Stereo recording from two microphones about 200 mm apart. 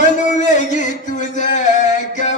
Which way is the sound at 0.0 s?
40° left (ahead or behind).